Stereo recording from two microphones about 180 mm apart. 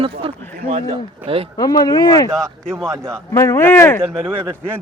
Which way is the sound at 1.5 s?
20° left (ahead or behind).